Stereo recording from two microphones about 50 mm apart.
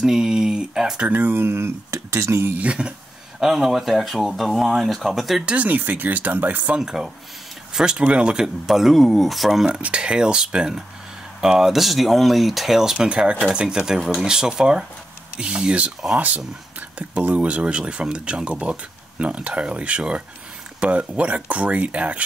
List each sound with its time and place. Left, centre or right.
0.0 s speech: centre
1.0 s speech: right
1.9 s a sound: right
2.6 s speech: right
3.3 s speech: centre
5.4 s speech: right
5.7 s speech: right
6.8 s speech: centre
9.7 s speech: right
13.1 s speech: centre